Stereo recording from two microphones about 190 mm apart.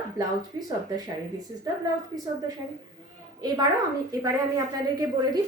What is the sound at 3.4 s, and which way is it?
Speech, 20° right (ahead or behind).